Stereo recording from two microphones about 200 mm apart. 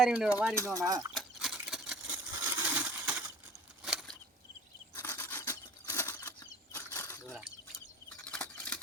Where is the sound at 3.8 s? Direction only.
Centre (ahead or behind).